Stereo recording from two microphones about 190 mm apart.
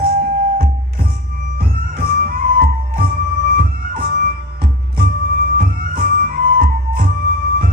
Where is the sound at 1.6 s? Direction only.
50° right (ahead or behind).